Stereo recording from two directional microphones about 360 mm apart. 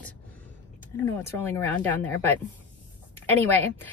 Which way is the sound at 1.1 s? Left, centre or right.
Centre.